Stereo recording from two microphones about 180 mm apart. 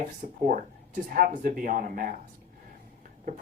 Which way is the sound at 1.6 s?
50° right (ahead or behind).